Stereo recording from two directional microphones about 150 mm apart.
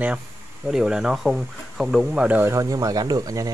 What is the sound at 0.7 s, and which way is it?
Speech, 5° right (ahead or behind).